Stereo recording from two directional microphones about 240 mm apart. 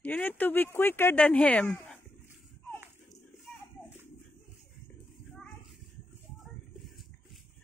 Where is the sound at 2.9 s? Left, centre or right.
Left.